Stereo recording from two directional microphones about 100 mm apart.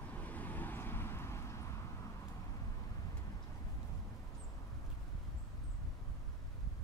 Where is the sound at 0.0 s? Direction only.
15° left (ahead or behind).